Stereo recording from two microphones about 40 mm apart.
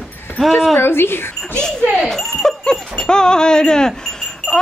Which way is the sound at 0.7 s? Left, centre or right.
Left.